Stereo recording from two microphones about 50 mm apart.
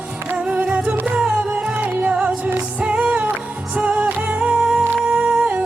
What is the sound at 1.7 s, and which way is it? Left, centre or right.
Music, right.